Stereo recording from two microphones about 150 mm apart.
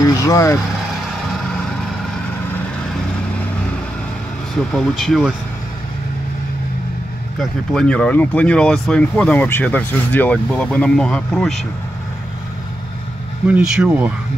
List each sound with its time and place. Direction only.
0.0 s speech: 25° left (ahead or behind)
1.2 s vehicle: centre (ahead or behind)
4.7 s speech: centre (ahead or behind)
7.3 s speech: 5° left (ahead or behind)
13.5 s speech: 5° right (ahead or behind)